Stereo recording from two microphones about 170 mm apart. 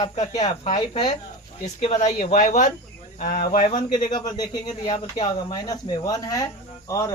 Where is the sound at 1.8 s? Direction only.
45° left (ahead or behind).